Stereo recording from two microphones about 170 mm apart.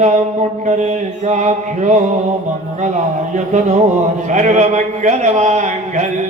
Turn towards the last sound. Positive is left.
turn(degrees=-45)  # may be behind; listen again after turning